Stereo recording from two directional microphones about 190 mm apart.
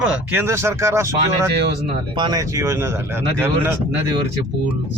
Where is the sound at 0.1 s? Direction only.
10° right (ahead or behind).